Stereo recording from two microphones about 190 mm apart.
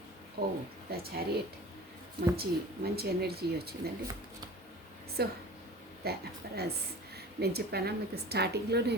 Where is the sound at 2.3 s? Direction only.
55° right (ahead or behind).